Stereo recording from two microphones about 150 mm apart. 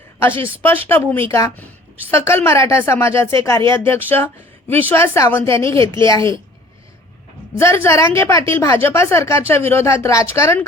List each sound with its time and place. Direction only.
0.9 s a woman's voice: 15° left (ahead or behind)
7.6 s a woman's voice: 15° left (ahead or behind)